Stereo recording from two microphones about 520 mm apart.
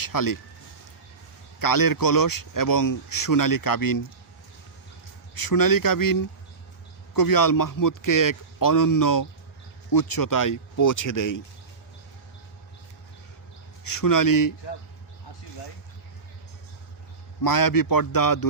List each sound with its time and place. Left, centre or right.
0.0 s speech: left
1.5 s speech: left
5.3 s speech: left
13.8 s speech: left
17.4 s speech: left